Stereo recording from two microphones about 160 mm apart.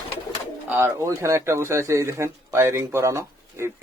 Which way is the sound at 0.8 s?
15° right (ahead or behind).